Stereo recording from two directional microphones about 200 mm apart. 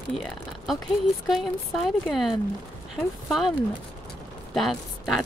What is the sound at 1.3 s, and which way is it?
Speech, centre (ahead or behind).